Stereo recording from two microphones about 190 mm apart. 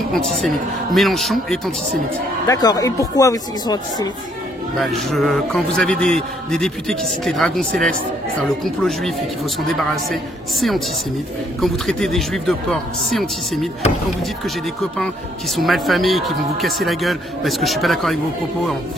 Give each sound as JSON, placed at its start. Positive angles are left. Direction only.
{"t": 0.9, "sound": "a man's voice", "side_deg": 0}
{"t": 2.4, "sound": "speech", "side_deg": 20}
{"t": 4.7, "sound": "a man's voice", "side_deg": 0}
{"t": 11.6, "sound": "a man's voice", "side_deg": 0}